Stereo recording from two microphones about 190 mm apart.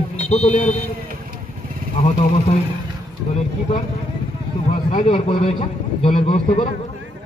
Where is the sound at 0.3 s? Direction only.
35° left (ahead or behind).